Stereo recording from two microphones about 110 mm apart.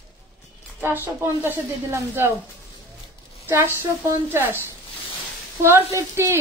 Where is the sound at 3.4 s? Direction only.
25° right (ahead or behind).